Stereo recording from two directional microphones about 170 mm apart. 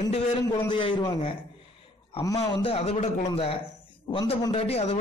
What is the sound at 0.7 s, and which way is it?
A man's voice, 30° left (ahead or behind).